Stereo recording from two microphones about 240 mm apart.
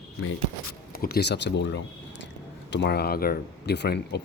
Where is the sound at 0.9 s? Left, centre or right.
Left.